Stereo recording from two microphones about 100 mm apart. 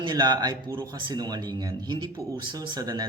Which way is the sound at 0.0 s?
45° right (ahead or behind).